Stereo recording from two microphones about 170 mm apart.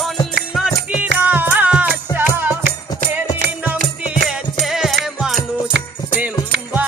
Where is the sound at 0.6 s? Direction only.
5° right (ahead or behind).